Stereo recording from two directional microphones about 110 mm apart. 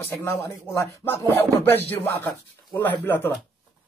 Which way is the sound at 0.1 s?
25° left (ahead or behind).